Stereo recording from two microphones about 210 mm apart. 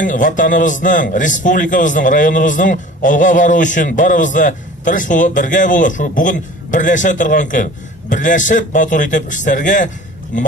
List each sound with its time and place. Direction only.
0.0 s a man's voice: 40° left (ahead or behind)